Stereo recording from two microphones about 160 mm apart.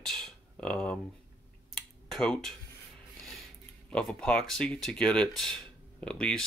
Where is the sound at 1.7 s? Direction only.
Centre (ahead or behind).